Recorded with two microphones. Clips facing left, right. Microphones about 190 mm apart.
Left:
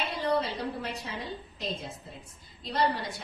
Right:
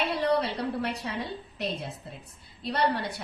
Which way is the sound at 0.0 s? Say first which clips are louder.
Right 3 dB; 65° right (ahead or behind).